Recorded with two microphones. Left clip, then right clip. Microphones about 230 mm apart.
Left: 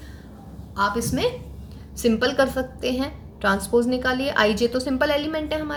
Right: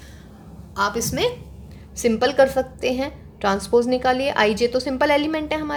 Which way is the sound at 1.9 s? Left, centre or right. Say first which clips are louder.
Right 2 dB; right.